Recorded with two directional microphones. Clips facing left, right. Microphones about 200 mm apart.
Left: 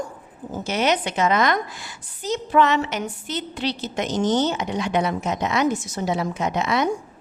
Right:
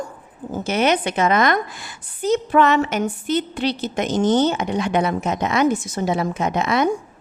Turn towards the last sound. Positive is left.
turn(degrees=-55)  # may be behind; listen again after turning